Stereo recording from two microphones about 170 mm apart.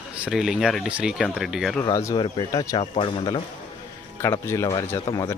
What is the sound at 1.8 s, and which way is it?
Speech, 20° left (ahead or behind).